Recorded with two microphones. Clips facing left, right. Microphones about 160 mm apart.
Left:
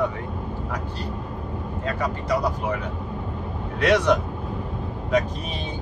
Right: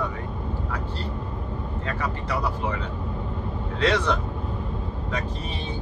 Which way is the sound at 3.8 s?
15° left (ahead or behind).